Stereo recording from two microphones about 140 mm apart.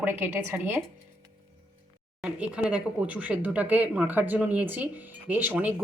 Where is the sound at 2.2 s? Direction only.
10° right (ahead or behind).